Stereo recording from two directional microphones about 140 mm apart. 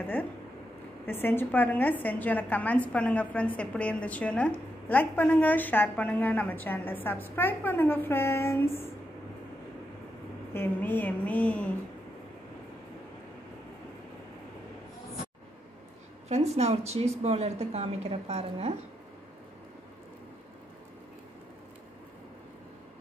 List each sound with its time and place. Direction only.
0.0 s a woman's voice: 15° left (ahead or behind)
10.5 s a woman's voice: 15° left (ahead or behind)
16.3 s a woman's voice: 50° right (ahead or behind)